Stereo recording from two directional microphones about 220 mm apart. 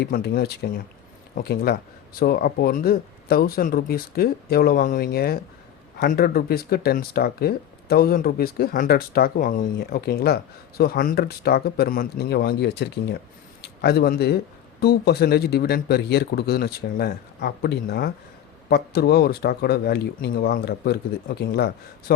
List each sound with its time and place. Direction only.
0.0 s speech: 45° left (ahead or behind)